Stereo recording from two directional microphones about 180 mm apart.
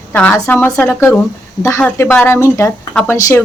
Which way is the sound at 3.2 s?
20° left (ahead or behind).